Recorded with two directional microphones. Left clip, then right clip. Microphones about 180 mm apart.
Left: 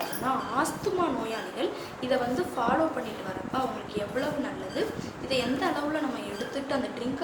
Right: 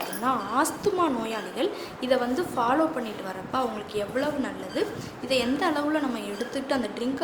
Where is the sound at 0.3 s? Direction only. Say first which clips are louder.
Right 3 dB; 65° right (ahead or behind).